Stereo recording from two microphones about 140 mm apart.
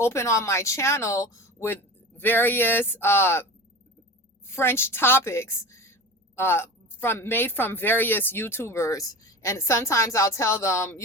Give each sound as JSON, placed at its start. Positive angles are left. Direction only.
{"t": 0.0, "sound": "a woman's voice", "side_deg": 20}
{"t": 4.4, "sound": "a woman's voice", "side_deg": 15}